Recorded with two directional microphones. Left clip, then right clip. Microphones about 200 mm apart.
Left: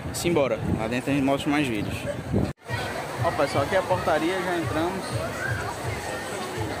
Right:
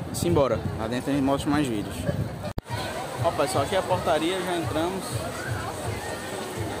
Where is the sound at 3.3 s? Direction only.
5° left (ahead or behind).